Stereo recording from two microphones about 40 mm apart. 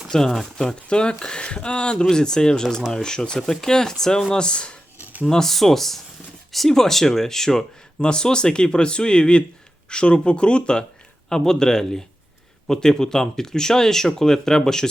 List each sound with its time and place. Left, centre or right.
0.1 s speech: centre
5.2 s speech: centre
8.0 s speech: left